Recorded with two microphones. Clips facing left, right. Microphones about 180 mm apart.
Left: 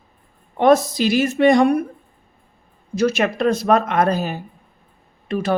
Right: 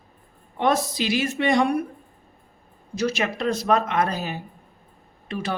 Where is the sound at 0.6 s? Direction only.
45° left (ahead or behind).